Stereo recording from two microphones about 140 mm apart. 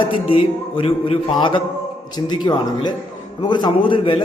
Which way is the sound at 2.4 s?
30° left (ahead or behind).